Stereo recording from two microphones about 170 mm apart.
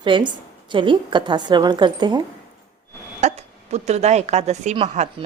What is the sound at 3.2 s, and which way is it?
Speech, 40° right (ahead or behind).